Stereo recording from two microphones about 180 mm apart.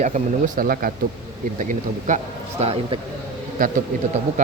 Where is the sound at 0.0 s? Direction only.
45° right (ahead or behind).